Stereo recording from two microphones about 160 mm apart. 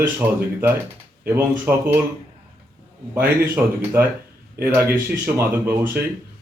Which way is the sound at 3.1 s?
15° right (ahead or behind).